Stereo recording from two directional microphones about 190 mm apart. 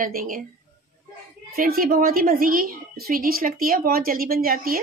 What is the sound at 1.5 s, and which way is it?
A woman's voice, 50° right (ahead or behind).